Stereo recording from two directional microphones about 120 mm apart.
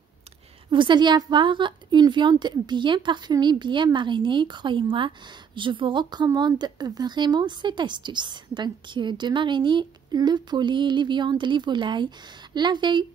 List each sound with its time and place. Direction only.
0.7 s a woman's voice: 40° right (ahead or behind)